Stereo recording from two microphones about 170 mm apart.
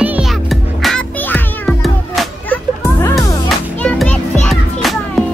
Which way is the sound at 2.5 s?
15° left (ahead or behind).